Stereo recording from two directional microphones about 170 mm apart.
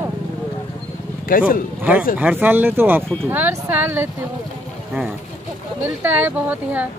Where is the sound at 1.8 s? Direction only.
10° right (ahead or behind).